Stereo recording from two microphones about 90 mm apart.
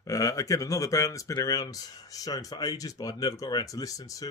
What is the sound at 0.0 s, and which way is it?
Speech, 40° left (ahead or behind).